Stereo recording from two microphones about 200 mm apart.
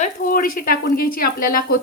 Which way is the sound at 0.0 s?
45° left (ahead or behind).